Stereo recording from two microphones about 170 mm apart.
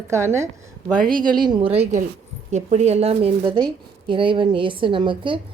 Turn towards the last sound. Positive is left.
turn(degrees=-30)  # may be behind; listen again after turning